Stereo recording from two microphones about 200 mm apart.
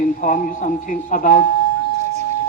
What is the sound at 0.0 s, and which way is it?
Speech, 40° left (ahead or behind).